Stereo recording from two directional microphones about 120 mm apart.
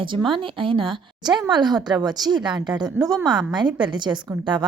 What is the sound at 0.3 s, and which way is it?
A woman's voice, 45° right (ahead or behind).